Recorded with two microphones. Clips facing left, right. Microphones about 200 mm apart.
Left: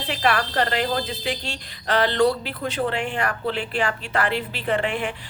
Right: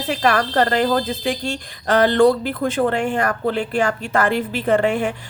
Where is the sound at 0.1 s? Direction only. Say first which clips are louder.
Right 4 dB; 45° right (ahead or behind).